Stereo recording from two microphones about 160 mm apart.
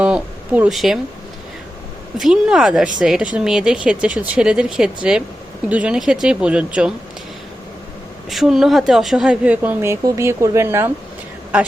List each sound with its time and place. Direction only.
0.0 s speech: 10° right (ahead or behind)
2.1 s a woman's voice: 5° right (ahead or behind)
8.3 s a woman's voice: centre (ahead or behind)